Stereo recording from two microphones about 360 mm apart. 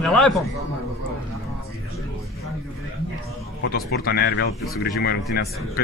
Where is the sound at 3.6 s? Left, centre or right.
Left.